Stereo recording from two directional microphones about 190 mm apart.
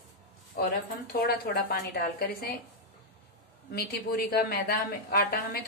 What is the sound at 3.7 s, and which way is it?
Speech, 55° left (ahead or behind).